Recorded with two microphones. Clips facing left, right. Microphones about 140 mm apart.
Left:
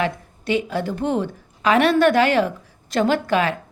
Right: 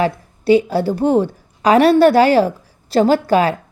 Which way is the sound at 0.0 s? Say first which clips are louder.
Right 6 dB; 35° right (ahead or behind).